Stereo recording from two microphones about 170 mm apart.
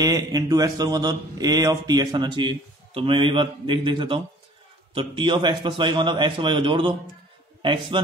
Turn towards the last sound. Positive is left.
turn(degrees=-30)  # may be behind; listen again after turning